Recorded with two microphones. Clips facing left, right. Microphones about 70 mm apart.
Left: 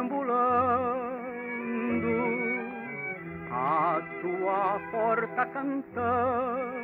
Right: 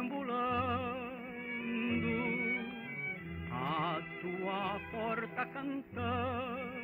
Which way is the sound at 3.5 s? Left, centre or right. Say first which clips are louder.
Left 10 dB; left.